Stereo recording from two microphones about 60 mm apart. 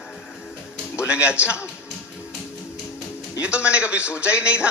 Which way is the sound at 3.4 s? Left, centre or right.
Centre.